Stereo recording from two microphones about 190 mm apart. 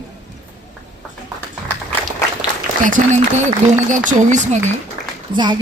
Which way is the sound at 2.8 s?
40° right (ahead or behind).